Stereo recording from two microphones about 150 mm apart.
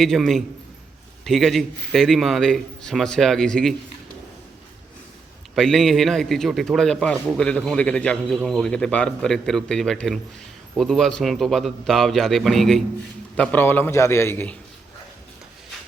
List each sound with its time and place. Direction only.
0.0 s a man's voice: centre (ahead or behind)
5.5 s a man's voice: centre (ahead or behind)